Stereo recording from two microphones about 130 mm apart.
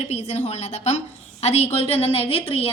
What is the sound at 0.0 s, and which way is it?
A woman's voice, 55° left (ahead or behind).